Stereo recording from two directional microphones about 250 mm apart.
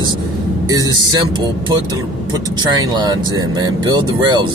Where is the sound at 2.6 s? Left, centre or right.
Centre.